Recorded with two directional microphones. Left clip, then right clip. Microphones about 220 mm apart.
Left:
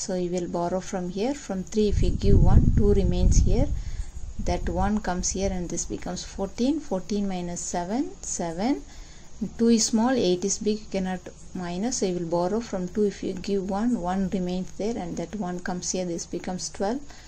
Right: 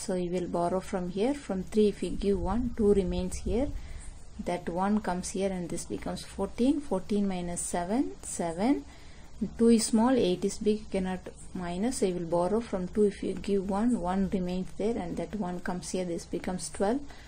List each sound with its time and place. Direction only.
0.0 s speech: centre (ahead or behind)